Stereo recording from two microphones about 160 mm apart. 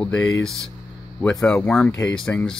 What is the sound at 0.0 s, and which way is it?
Speech, 10° left (ahead or behind).